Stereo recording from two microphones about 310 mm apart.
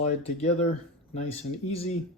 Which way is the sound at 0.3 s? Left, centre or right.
Centre.